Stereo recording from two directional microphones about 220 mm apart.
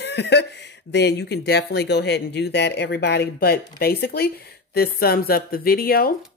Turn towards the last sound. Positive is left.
turn(degrees=40)  # may be behind; listen again after turning